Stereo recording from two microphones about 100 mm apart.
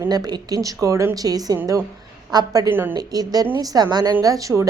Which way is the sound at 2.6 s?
20° right (ahead or behind).